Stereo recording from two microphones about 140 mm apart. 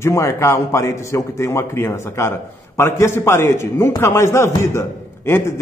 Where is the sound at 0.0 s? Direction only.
20° left (ahead or behind).